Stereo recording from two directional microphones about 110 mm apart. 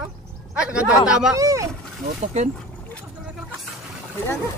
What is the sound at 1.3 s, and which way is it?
Speech, 30° right (ahead or behind).